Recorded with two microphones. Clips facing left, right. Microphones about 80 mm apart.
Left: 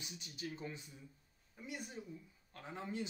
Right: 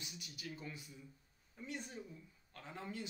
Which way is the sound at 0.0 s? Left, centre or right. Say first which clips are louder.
Left 3 dB; left.